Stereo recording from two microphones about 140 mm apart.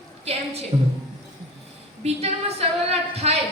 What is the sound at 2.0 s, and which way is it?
A woman's voice, 45° right (ahead or behind).